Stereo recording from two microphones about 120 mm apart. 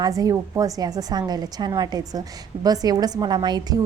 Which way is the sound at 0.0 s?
30° right (ahead or behind).